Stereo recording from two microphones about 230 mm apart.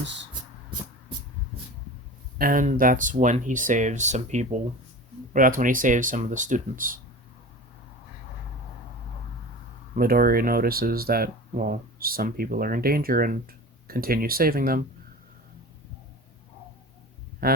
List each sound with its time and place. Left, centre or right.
2.4 s speech: right
9.9 s speech: right
17.4 s speech: right